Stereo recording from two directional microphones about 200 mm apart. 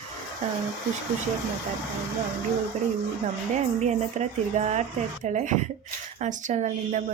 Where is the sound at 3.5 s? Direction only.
35° right (ahead or behind).